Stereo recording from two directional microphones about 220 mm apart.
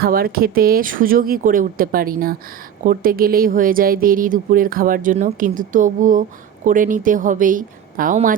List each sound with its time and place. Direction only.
0.0 s speech: 40° right (ahead or behind)